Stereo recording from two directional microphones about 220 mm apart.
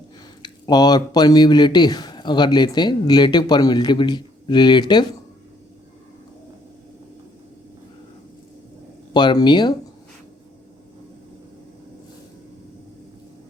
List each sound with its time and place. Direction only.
0.4 s speech: 20° left (ahead or behind)
9.1 s speech: 20° left (ahead or behind)